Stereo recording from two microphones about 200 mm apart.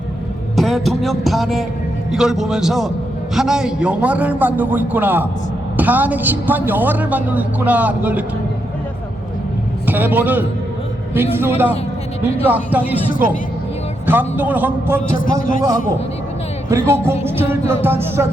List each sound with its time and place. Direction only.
0.5 s a man's voice: centre (ahead or behind)
9.8 s a man's voice: 10° right (ahead or behind)
15.2 s a man's voice: 45° left (ahead or behind)
16.6 s a woman's voice: 15° right (ahead or behind)